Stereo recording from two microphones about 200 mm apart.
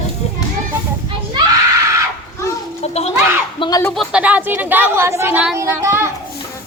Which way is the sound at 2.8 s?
30° left (ahead or behind).